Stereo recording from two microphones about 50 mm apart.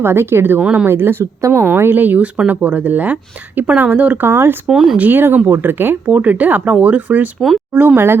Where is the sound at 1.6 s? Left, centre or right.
Right.